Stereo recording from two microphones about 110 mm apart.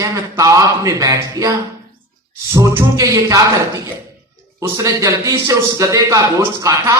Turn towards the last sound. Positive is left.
turn(degrees=-30)  # may be behind; listen again after turning